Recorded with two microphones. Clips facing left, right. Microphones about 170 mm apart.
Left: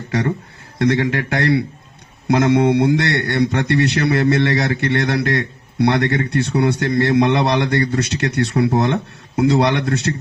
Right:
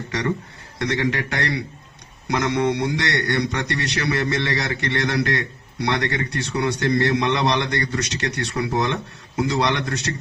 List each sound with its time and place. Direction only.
0.8 s a man's voice: 55° left (ahead or behind)